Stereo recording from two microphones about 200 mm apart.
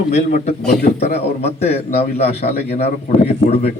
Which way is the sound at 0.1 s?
40° left (ahead or behind).